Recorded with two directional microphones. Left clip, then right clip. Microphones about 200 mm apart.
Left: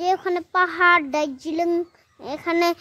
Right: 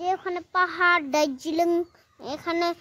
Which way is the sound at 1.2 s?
5° right (ahead or behind).